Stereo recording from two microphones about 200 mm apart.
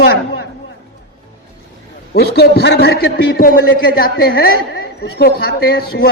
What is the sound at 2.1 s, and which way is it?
A man's voice, 55° left (ahead or behind).